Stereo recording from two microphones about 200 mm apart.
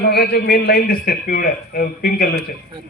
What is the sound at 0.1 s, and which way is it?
A man's voice, 50° left (ahead or behind).